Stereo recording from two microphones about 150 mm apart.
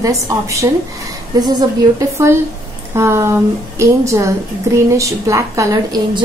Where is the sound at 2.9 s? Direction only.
20° right (ahead or behind).